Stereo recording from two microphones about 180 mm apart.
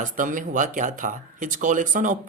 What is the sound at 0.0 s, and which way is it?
Speech, 45° right (ahead or behind).